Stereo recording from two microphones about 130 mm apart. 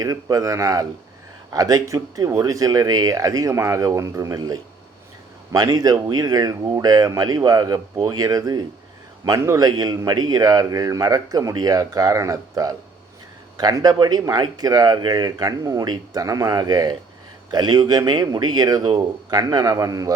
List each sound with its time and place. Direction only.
0.0 s a man's voice: 25° right (ahead or behind)